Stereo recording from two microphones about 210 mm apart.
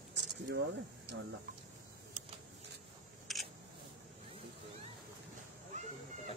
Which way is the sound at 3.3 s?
Centre (ahead or behind).